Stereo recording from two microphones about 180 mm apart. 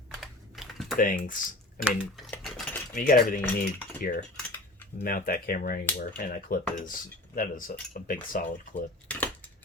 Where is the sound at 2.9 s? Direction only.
50° left (ahead or behind).